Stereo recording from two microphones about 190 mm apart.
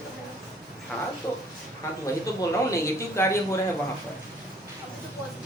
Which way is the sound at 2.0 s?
15° left (ahead or behind).